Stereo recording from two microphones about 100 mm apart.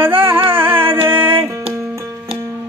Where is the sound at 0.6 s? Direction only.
20° right (ahead or behind).